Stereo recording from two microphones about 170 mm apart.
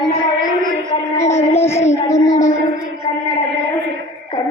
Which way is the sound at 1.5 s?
15° left (ahead or behind).